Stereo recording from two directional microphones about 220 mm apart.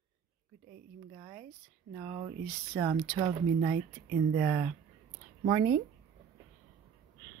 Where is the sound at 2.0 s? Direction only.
25° right (ahead or behind).